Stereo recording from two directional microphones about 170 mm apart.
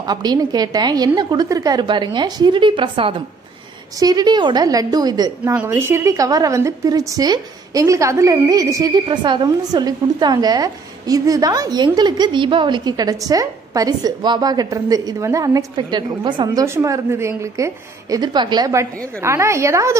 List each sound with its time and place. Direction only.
0.0 s a woman's voice: 25° right (ahead or behind)
16.6 s a woman's voice: 15° right (ahead or behind)